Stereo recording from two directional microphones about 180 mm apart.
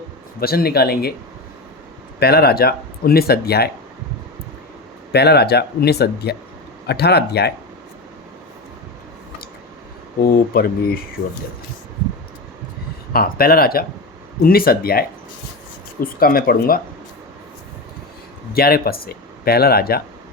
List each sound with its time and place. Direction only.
0.3 s speech: 60° left (ahead or behind)
2.1 s speech: 60° left (ahead or behind)
5.1 s speech: 65° left (ahead or behind)
10.2 s speech: 55° left (ahead or behind)
13.1 s speech: 55° left (ahead or behind)
18.5 s speech: 55° left (ahead or behind)